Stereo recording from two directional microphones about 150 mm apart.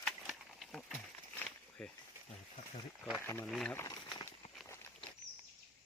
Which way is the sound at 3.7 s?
25° left (ahead or behind).